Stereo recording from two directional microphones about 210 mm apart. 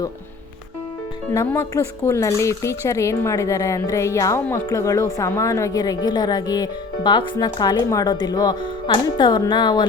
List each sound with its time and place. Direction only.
1.3 s speech: 15° left (ahead or behind)